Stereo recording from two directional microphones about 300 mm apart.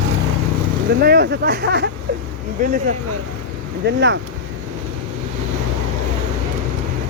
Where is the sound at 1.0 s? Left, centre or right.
Right.